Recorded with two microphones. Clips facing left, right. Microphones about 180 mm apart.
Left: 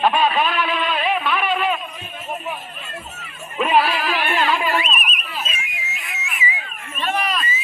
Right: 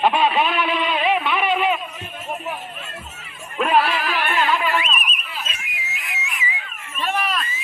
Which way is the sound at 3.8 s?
40° left (ahead or behind).